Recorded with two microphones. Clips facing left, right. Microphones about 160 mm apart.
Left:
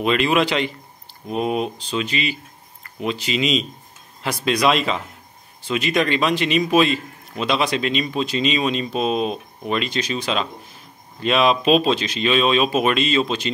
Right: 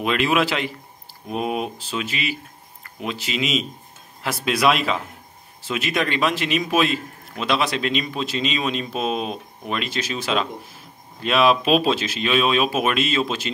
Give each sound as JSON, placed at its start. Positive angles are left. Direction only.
{"t": 0.0, "sound": "a man's voice", "side_deg": 0}